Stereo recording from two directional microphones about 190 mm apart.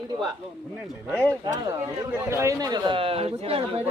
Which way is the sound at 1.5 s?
20° right (ahead or behind).